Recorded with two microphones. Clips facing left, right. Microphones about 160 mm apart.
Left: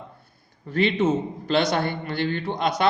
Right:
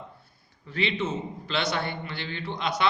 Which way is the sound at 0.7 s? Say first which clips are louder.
Left 8 dB; 45° left (ahead or behind).